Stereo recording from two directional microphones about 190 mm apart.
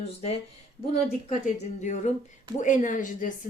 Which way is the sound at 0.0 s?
35° left (ahead or behind).